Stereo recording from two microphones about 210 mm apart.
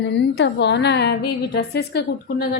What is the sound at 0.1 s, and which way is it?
A woman's voice, 60° left (ahead or behind).